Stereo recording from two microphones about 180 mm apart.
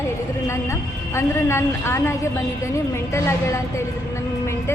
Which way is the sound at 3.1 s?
15° left (ahead or behind).